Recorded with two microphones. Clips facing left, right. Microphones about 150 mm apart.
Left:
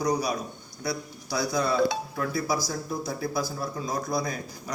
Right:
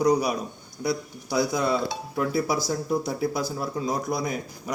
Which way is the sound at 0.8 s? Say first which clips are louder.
Right 5 dB; 20° right (ahead or behind).